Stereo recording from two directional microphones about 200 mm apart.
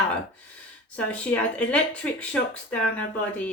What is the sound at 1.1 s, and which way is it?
Speech, 5° left (ahead or behind).